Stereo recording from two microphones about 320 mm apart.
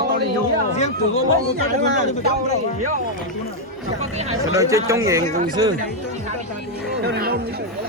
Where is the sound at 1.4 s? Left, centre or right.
Right.